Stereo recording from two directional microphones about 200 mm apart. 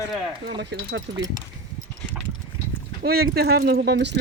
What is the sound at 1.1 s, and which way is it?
Speech, 20° right (ahead or behind).